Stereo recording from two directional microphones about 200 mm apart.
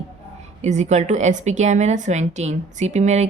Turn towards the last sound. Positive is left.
turn(degrees=-35)  # may be behind; listen again after turning